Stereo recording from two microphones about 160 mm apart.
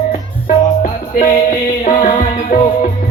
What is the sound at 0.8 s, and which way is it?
Music, 55° left (ahead or behind).